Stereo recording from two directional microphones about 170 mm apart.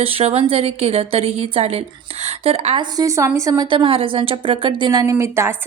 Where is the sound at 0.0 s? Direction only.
35° right (ahead or behind).